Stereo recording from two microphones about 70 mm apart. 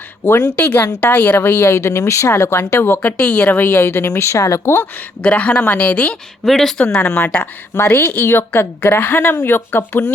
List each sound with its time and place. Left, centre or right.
0.3 s speech: left
0.6 s a woman's voice: left
1.7 s speech: left; by 3.6 s centre
3.6 s speech: left
5.2 s speech: centre
6.4 s speech: centre
6.9 s speech: centre
7.8 s a woman's voice: left